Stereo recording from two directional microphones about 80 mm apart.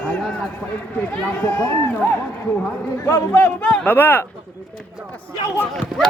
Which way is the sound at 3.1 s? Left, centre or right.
Left.